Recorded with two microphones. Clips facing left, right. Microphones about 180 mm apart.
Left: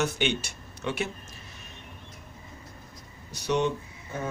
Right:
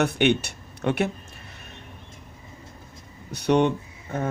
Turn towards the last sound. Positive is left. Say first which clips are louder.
# right 4 dB
turn(degrees=-60)  # may be behind; listen again after turning